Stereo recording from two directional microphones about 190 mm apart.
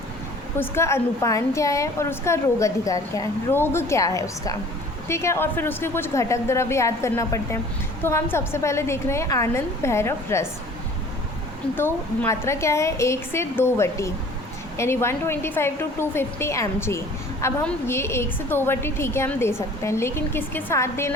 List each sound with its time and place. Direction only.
0.6 s a woman's voice: 15° left (ahead or behind)
12.2 s a woman's voice: 15° left (ahead or behind)